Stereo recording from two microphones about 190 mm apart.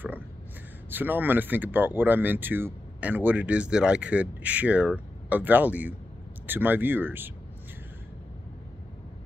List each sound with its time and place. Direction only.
0.8 s speech: 10° right (ahead or behind)